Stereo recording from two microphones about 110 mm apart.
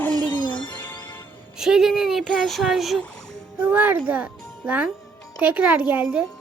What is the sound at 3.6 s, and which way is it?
A child's voice, 15° right (ahead or behind).